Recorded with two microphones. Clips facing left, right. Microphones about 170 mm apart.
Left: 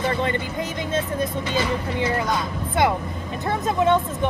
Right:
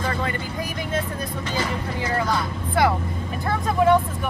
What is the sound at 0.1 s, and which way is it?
Vehicle, 25° left (ahead or behind).